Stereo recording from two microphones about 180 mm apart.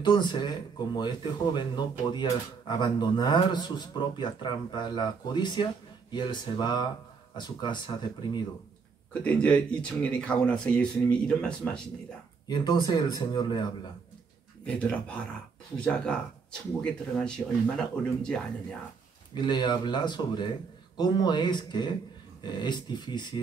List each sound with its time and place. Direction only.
0.0 s speech: 25° left (ahead or behind)
9.2 s speech: 5° left (ahead or behind)
12.4 s speech: 25° left (ahead or behind)
14.8 s speech: 5° left (ahead or behind)
17.4 s speech: 10° left (ahead or behind)
19.3 s speech: 25° left (ahead or behind)